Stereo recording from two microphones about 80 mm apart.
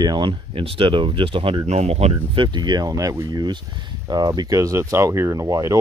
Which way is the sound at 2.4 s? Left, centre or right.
Right.